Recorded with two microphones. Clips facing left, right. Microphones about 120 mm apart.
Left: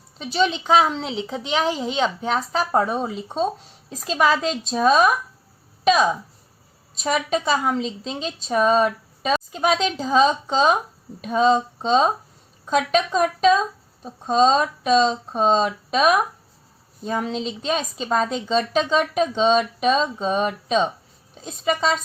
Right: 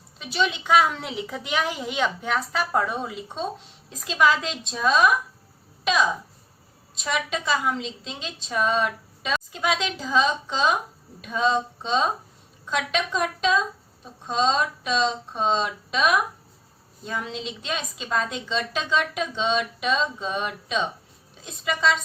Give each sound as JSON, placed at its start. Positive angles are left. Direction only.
{"t": 0.3, "sound": "a woman's voice", "side_deg": 35}
{"t": 5.8, "sound": "a sound", "side_deg": 40}
{"t": 7.0, "sound": "a woman's voice", "side_deg": 40}